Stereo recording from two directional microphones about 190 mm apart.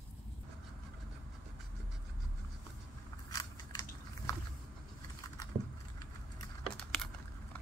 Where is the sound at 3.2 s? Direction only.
20° left (ahead or behind).